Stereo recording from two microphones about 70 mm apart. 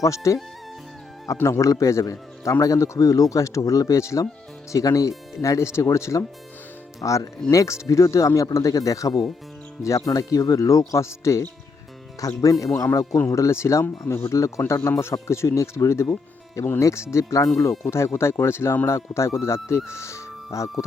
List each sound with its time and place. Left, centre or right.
0.0 s a man's voice: left
1.4 s a man's voice: left
14.7 s a man's voice: left